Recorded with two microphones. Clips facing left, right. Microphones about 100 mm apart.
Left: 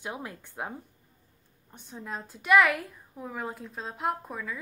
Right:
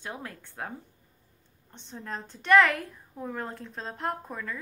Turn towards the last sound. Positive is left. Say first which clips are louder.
# left 1 dB
turn(degrees=5)  # may be behind; listen again after turning